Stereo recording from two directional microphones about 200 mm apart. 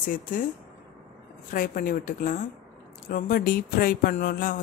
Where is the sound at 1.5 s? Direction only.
45° left (ahead or behind).